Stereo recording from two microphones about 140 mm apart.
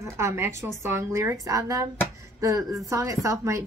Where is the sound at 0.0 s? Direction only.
20° right (ahead or behind).